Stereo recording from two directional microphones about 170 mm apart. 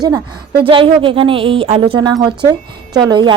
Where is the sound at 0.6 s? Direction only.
30° right (ahead or behind).